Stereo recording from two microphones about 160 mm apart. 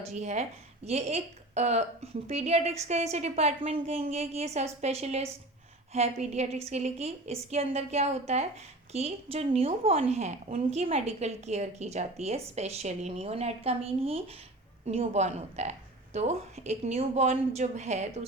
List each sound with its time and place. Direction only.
0.0 s a woman's voice: 45° right (ahead or behind)